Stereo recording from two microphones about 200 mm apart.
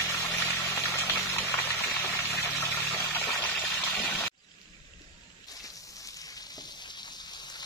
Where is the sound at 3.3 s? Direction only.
5° left (ahead or behind).